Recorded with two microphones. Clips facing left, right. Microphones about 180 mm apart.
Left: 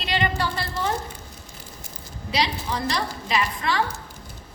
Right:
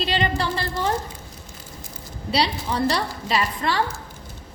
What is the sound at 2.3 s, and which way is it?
A woman's voice, 35° right (ahead or behind).